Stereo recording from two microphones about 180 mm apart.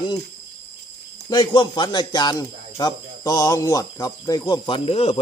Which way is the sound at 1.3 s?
25° left (ahead or behind).